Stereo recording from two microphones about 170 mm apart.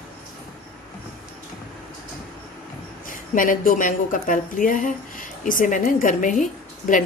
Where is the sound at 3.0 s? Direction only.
50° left (ahead or behind).